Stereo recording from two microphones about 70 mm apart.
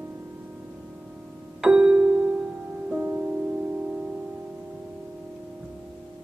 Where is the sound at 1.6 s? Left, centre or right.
Centre.